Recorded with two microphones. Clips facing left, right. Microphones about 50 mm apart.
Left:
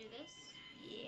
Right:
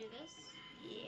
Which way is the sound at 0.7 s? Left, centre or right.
Centre.